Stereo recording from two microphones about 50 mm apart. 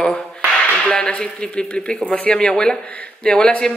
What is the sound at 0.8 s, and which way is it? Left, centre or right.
Speech, centre.